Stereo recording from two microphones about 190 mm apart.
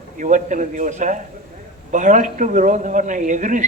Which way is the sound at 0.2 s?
40° right (ahead or behind).